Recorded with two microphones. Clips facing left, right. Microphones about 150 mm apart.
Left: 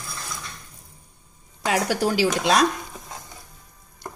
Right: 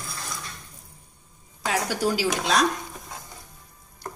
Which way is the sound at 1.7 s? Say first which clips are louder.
Left 3 dB; 75° left (ahead or behind).